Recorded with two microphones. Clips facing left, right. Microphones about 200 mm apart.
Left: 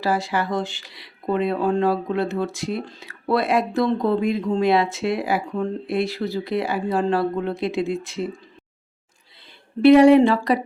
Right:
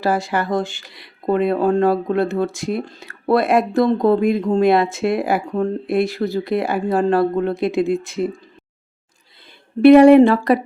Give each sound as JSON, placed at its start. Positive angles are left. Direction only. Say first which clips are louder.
{"t": 0.0, "sound": "speech", "louder": "right 3 dB", "side_deg": -50}
{"t": 9.8, "sound": "speech", "louder": "right 4 dB", "side_deg": -55}